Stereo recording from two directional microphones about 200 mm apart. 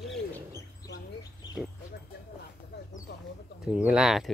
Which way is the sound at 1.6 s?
5° right (ahead or behind).